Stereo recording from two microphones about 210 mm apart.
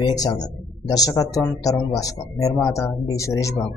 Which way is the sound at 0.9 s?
15° left (ahead or behind).